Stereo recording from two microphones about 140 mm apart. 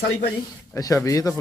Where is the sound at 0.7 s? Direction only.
20° left (ahead or behind).